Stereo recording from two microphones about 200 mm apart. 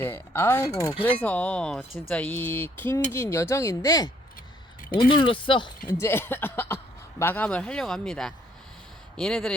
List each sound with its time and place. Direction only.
0.0 s speech: 10° left (ahead or behind)
5.9 s speech: 10° left (ahead or behind)